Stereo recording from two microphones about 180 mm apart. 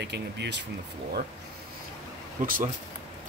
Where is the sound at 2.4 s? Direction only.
45° right (ahead or behind).